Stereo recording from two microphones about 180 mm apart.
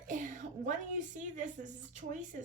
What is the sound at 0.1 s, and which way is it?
A woman's voice, 45° right (ahead or behind).